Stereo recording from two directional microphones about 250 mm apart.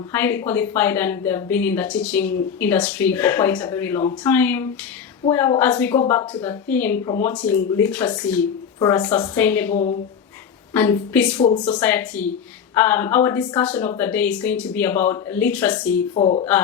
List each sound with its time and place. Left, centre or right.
0.1 s speech: centre
10.8 s speech: centre
16.1 s speech: left